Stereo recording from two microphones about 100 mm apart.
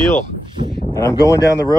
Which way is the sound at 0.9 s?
35° left (ahead or behind).